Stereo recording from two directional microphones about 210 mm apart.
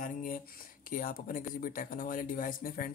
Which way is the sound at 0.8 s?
40° left (ahead or behind).